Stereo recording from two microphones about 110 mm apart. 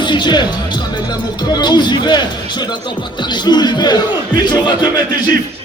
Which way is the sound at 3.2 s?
45° left (ahead or behind).